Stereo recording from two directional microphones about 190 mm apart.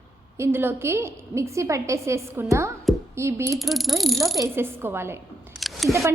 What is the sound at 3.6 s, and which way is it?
Cricket, centre (ahead or behind).